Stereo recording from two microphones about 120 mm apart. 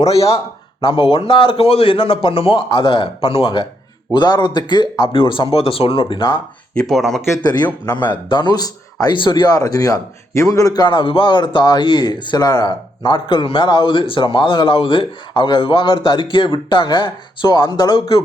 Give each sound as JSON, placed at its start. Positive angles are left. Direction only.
{"t": 0.0, "sound": "a man's voice", "side_deg": 55}
{"t": 0.8, "sound": "a man's voice", "side_deg": 45}
{"t": 6.7, "sound": "speech", "side_deg": 0}
{"t": 7.4, "sound": "speech", "side_deg": 35}